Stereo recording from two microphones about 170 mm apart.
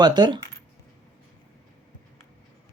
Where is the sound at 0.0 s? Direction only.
25° right (ahead or behind).